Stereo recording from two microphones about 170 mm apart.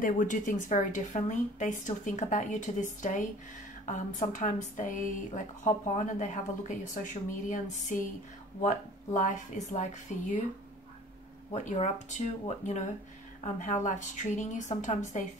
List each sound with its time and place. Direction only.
0.0 s a woman's voice: 50° left (ahead or behind)
7.4 s a woman's voice: 50° left (ahead or behind)
11.5 s a woman's voice: 45° left (ahead or behind)